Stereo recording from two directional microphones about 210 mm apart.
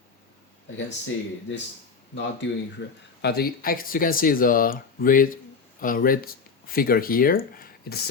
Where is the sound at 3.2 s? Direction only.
50° left (ahead or behind).